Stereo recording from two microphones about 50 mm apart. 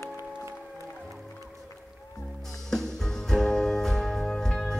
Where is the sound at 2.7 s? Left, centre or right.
Centre.